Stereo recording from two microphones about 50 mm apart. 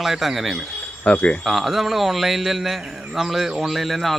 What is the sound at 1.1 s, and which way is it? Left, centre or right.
Speech, left.